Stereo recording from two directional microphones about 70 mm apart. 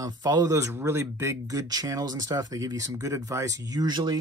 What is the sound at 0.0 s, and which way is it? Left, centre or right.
Speech, right.